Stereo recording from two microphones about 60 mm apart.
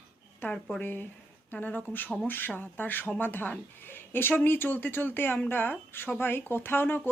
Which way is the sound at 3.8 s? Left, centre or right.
Left.